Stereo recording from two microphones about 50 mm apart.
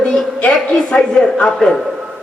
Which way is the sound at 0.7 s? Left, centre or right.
Left.